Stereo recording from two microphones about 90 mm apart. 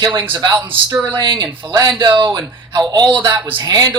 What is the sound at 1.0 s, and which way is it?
Speech, 65° right (ahead or behind).